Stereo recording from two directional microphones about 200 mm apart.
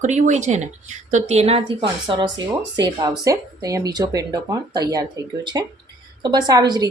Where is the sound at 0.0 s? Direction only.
35° right (ahead or behind).